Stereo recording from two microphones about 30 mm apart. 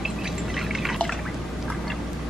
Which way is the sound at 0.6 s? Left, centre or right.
Centre.